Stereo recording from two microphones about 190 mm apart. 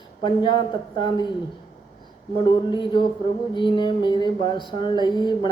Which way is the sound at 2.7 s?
25° left (ahead or behind).